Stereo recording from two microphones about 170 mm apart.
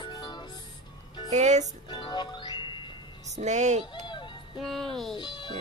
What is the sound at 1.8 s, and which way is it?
Music, 30° left (ahead or behind).